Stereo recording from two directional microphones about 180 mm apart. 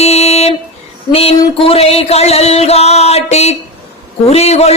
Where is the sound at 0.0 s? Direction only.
35° left (ahead or behind).